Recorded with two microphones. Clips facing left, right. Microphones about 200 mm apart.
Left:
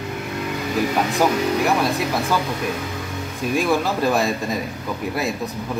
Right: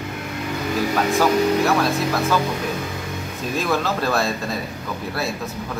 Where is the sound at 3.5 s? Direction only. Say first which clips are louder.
Left 2 dB; 10° left (ahead or behind).